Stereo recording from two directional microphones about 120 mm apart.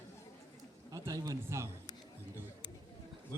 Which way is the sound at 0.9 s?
30° right (ahead or behind).